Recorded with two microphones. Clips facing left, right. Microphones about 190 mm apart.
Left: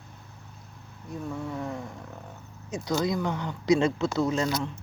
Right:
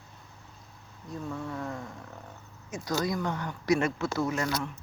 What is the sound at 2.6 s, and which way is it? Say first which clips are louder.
Speech: left 3 dB; 15° left (ahead or behind).